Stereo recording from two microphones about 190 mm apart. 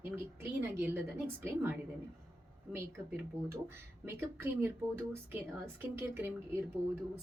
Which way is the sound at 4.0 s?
10° right (ahead or behind).